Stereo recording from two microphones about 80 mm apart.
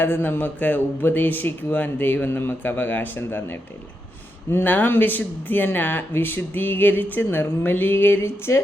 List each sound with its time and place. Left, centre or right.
0.0 s speech: left